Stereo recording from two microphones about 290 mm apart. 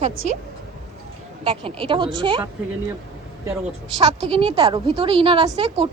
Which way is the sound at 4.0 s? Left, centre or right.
Centre.